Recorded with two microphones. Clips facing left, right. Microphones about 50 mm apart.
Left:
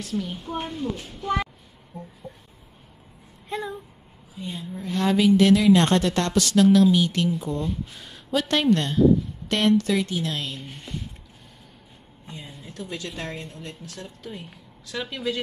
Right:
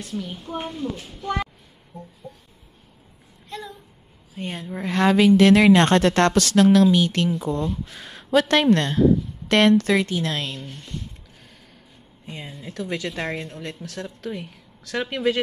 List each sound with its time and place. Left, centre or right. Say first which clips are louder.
0.1 s a woman's voice: left 1 dB; centre
3.4 s a sound: left 5 dB; left
4.4 s a woman's voice: right 4 dB; right
10.6 s speech: right 1 dB; centre
12.3 s speech: right 4 dB; right